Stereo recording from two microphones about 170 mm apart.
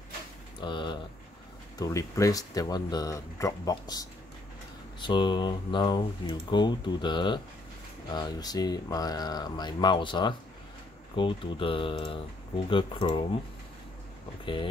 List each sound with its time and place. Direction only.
0.6 s speech: 30° left (ahead or behind)
14.4 s speech: 30° left (ahead or behind)